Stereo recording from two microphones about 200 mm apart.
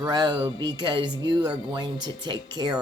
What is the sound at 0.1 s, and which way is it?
Speech, 20° right (ahead or behind).